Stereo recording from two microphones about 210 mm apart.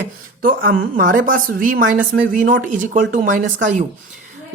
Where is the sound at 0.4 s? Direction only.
45° right (ahead or behind).